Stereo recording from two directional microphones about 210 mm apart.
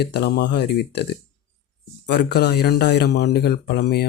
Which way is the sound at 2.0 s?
50° left (ahead or behind).